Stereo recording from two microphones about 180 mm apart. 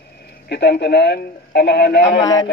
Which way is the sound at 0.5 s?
65° left (ahead or behind).